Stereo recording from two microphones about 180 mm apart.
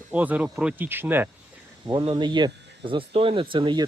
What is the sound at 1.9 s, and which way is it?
Speech, 25° right (ahead or behind).